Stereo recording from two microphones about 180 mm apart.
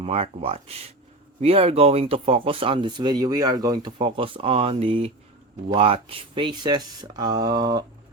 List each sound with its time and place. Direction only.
0.0 s speech: 35° right (ahead or behind)